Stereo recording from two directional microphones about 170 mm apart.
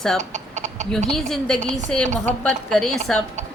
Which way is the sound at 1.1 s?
Centre (ahead or behind).